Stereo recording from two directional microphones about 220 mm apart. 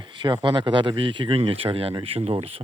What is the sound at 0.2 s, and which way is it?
Speech, 20° right (ahead or behind).